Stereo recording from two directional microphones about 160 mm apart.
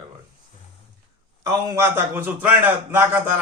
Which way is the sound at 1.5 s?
20° right (ahead or behind).